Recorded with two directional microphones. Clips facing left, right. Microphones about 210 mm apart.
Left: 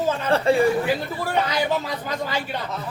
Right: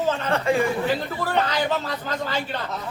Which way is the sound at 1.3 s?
10° left (ahead or behind).